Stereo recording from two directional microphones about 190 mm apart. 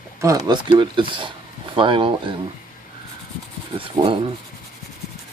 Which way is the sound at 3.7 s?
30° right (ahead or behind).